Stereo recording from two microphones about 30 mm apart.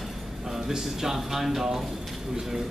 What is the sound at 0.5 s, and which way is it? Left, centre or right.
Speech, centre.